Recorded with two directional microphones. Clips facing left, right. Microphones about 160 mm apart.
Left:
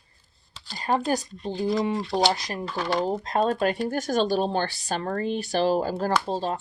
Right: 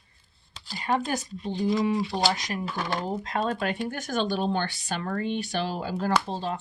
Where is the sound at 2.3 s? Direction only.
30° left (ahead or behind).